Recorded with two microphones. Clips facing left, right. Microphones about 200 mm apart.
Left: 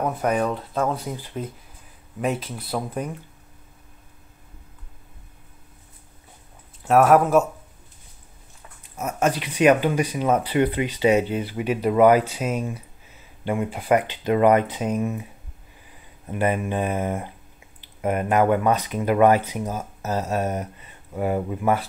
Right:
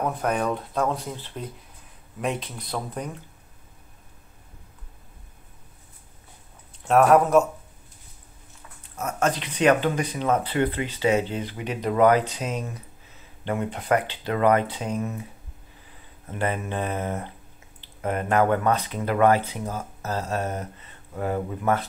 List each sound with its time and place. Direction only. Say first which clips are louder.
0.0 s speech: left 2 dB; 5° left (ahead or behind)
6.8 s speech: left 1 dB; 5° left (ahead or behind)
8.9 s speech: left 2 dB; 10° left (ahead or behind)
16.3 s speech: left 4 dB; 15° left (ahead or behind)